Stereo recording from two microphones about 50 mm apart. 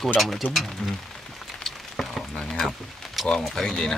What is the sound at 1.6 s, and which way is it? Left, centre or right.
Frying, centre.